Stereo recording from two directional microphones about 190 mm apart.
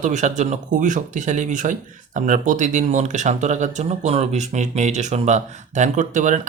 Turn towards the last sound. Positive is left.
turn(degrees=-40)  # may be behind; listen again after turning